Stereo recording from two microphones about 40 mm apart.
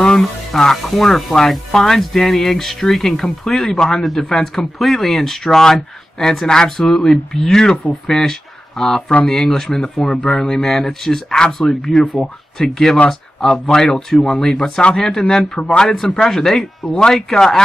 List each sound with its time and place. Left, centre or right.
0.5 s speech: centre